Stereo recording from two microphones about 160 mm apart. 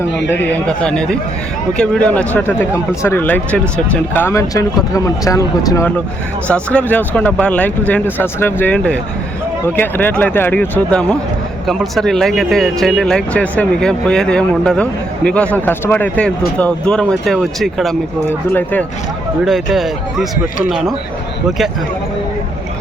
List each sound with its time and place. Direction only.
0.3 s speech: 10° left (ahead or behind)
6.5 s speech: 10° left (ahead or behind)
19.5 s speech: centre (ahead or behind)